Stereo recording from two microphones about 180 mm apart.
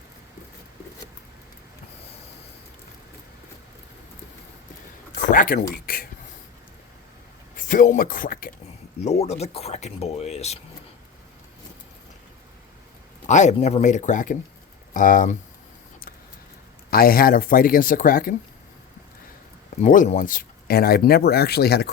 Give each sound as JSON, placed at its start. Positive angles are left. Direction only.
{"t": 5.1, "sound": "speech", "side_deg": 50}
{"t": 7.5, "sound": "speech", "side_deg": 50}
{"t": 9.0, "sound": "speech", "side_deg": 35}
{"t": 13.2, "sound": "speech", "side_deg": 40}
{"t": 16.9, "sound": "speech", "side_deg": 55}
{"t": 19.8, "sound": "speech", "side_deg": 45}